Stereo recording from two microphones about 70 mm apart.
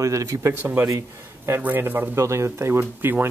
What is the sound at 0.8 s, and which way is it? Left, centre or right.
Speech, right.